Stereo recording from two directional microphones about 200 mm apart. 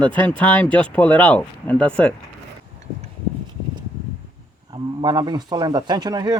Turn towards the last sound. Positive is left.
turn(degrees=-20)  # may be behind; listen again after turning